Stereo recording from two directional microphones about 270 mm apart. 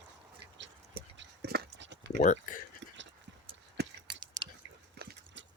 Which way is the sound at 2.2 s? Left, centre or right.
Left.